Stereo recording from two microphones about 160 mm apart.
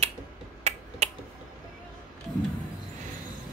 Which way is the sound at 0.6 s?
40° right (ahead or behind).